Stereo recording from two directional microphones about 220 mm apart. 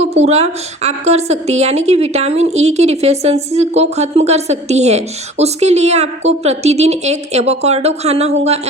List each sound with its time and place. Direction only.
0.0 s a woman's voice: 30° right (ahead or behind)